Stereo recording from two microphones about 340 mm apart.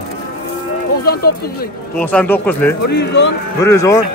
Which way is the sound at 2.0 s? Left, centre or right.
Centre.